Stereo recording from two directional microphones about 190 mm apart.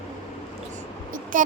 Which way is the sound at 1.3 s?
45° right (ahead or behind).